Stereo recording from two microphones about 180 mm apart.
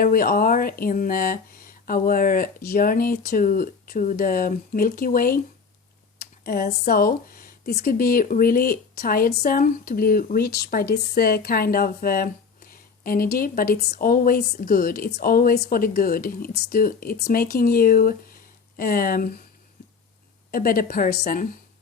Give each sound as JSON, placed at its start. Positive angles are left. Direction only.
{"t": 0.0, "sound": "speech", "side_deg": 50}
{"t": 6.1, "sound": "a sound", "side_deg": 55}
{"t": 6.8, "sound": "speech", "side_deg": 55}
{"t": 20.5, "sound": "speech", "side_deg": 55}